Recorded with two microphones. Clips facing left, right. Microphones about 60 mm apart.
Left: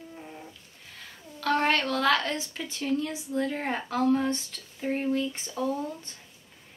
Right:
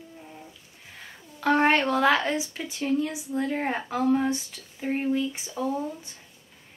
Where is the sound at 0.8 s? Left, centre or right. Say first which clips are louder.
Right 1 dB; centre.